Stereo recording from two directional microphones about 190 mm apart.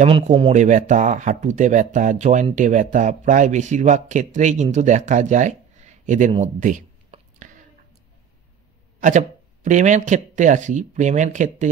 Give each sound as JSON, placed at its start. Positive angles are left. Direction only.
{"t": 0.0, "sound": "speech", "side_deg": -30}
{"t": 6.4, "sound": "a sound", "side_deg": -40}
{"t": 9.0, "sound": "speech", "side_deg": -40}